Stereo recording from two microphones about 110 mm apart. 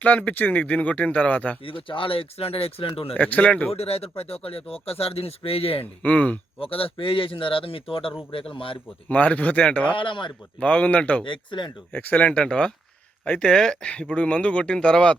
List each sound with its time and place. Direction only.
0.0 s speech: 15° left (ahead or behind)
1.6 s speech: 55° left (ahead or behind)
3.2 s speech: 15° left (ahead or behind)
3.7 s speech: 65° left (ahead or behind)
6.0 s speech: 15° left (ahead or behind)
6.6 s speech: 60° left (ahead or behind)
9.0 s speech: 15° left (ahead or behind)
10.0 s speech: 50° left (ahead or behind)
10.6 s speech: 15° left (ahead or behind)
11.3 s speech: 45° left (ahead or behind)
11.9 s speech: 10° left (ahead or behind)